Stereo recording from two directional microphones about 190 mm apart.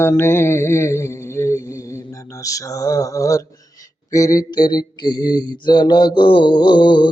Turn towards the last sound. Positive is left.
turn(degrees=25)  # may be behind; listen again after turning